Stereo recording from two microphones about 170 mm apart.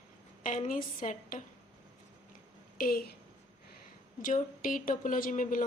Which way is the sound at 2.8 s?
60° left (ahead or behind).